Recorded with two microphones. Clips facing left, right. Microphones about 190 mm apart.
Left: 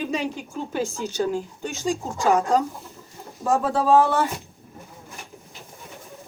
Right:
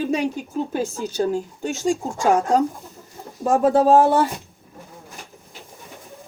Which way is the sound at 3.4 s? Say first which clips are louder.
Right 5 dB; 50° right (ahead or behind).